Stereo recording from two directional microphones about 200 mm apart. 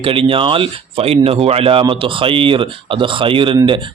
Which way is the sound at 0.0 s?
25° right (ahead or behind).